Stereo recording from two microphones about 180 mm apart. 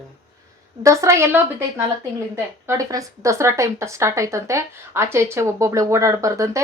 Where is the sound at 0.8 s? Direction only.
20° right (ahead or behind).